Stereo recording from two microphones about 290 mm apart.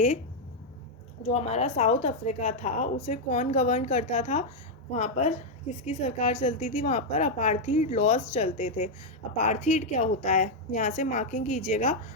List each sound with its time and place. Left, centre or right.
1.3 s a woman's voice: left